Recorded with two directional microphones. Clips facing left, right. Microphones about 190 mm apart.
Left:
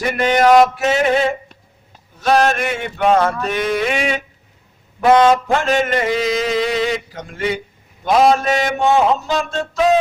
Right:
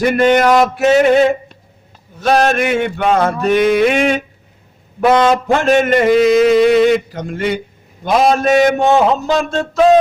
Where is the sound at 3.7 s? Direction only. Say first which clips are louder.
Right 6 dB; 50° right (ahead or behind).